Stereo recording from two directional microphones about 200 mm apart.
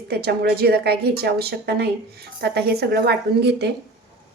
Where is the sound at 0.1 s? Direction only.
50° right (ahead or behind).